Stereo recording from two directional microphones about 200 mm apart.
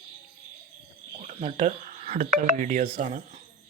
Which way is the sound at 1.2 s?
35° right (ahead or behind).